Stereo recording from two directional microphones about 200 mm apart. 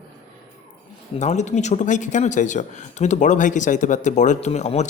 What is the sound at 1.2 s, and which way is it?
Speech, 35° left (ahead or behind).